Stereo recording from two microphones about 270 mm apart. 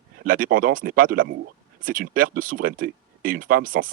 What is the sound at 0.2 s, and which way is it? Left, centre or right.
Speech, right.